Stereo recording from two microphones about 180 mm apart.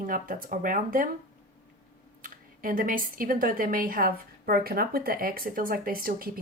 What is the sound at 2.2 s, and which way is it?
A woman's voice, 50° right (ahead or behind).